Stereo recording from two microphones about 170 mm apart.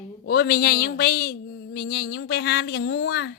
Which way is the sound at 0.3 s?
65° left (ahead or behind).